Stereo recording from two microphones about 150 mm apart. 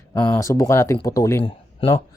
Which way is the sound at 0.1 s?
20° left (ahead or behind).